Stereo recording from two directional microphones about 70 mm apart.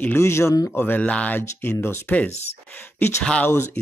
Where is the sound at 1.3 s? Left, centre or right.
Left.